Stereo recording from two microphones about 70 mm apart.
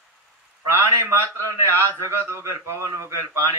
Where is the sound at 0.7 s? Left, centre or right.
Right.